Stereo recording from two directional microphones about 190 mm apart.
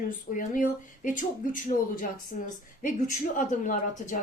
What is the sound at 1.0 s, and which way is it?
A woman's voice, 45° left (ahead or behind).